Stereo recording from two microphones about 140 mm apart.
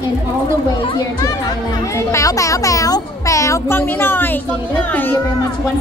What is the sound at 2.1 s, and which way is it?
A child's voice, 25° left (ahead or behind).